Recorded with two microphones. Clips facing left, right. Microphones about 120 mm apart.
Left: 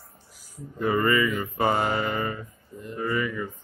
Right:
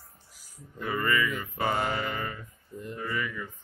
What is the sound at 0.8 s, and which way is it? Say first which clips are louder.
Mantra: left 6 dB; 30° left (ahead or behind).